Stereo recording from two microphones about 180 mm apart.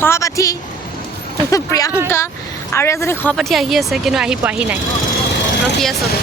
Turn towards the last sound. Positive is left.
turn(degrees=-10)  # may be behind; listen again after turning